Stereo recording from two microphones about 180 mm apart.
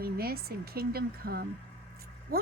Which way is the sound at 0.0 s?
60° right (ahead or behind).